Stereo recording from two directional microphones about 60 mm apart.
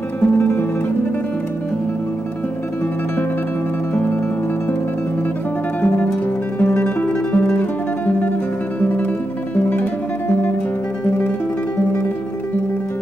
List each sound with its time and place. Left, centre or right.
0.4 s guitar: left
5.8 s music: left
9.7 s music: left